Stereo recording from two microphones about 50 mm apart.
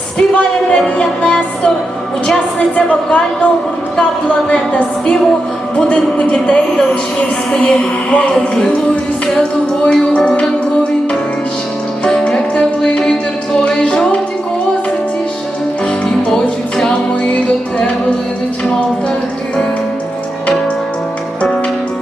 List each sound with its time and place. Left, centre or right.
0.2 s a woman's voice: left
0.9 s music: centre
2.6 s a woman's voice: left
7.5 s music: centre
9.2 s a woman's voice: centre
10.1 s music: centre
12.2 s music: centre
16.3 s music: centre
18.6 s music: centre